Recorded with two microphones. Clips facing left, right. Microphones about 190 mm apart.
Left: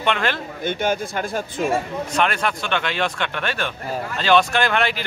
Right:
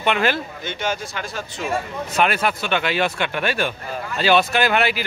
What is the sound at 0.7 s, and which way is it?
Speech, 55° left (ahead or behind).